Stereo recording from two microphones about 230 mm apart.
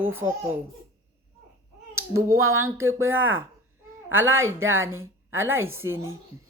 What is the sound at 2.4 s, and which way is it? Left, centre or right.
Speech, right.